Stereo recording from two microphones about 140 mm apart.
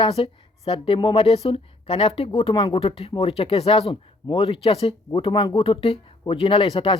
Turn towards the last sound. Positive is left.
turn(degrees=40)  # may be behind; listen again after turning